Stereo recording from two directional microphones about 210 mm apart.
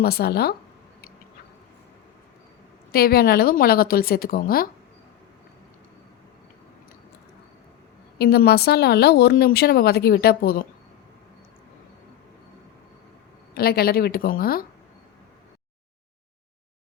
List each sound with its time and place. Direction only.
0.0 s speech: 50° left (ahead or behind)
2.9 s speech: 45° left (ahead or behind)
8.2 s speech: 50° left (ahead or behind)
13.5 s speech: 45° left (ahead or behind)